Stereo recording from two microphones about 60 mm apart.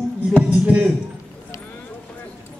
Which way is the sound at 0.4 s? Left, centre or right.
Right.